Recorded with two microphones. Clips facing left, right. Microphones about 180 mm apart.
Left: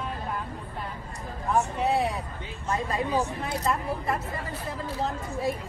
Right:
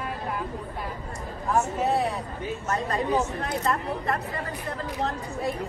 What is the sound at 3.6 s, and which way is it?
Speech, centre (ahead or behind).